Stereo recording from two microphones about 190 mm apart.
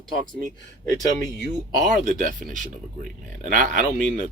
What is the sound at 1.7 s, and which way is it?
Speech, 45° right (ahead or behind).